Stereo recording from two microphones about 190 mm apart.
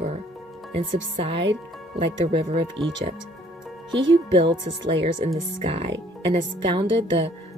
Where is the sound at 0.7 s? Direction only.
30° right (ahead or behind).